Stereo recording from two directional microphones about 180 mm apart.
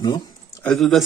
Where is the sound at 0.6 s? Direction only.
Centre (ahead or behind).